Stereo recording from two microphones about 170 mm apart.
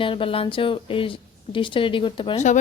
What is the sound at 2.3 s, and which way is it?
Speech, 45° left (ahead or behind).